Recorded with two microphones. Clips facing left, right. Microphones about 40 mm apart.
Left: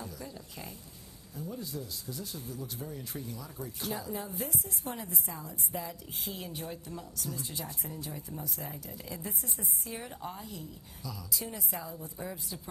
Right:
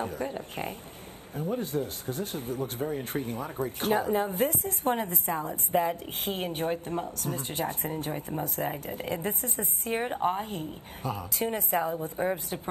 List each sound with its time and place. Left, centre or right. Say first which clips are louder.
0.0 s speech: right 11 dB; right